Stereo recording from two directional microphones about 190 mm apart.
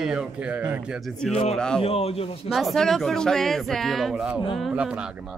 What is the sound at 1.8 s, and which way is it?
Speech, 30° left (ahead or behind).